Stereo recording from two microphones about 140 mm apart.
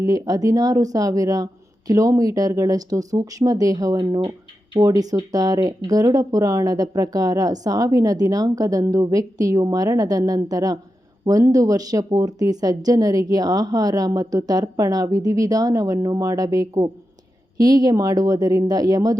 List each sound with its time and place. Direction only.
0.0 s speech: 25° right (ahead or behind)